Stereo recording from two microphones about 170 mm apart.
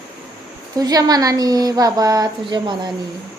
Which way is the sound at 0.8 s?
20° right (ahead or behind).